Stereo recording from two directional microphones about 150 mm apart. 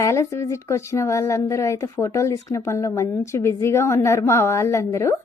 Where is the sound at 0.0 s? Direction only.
20° left (ahead or behind).